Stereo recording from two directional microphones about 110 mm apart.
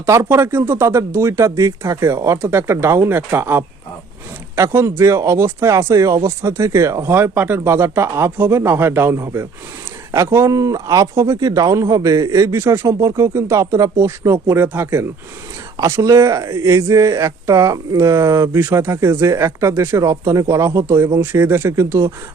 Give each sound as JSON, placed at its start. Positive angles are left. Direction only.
{"t": 0.0, "sound": "speech", "side_deg": -25}